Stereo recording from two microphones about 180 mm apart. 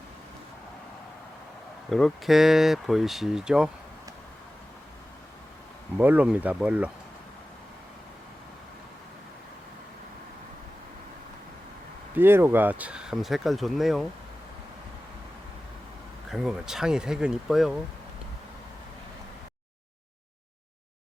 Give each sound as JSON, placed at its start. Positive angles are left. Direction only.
{"t": 1.9, "sound": "speech", "side_deg": 0}
{"t": 6.0, "sound": "speech", "side_deg": -10}
{"t": 12.1, "sound": "speech", "side_deg": -10}
{"t": 16.3, "sound": "speech", "side_deg": 0}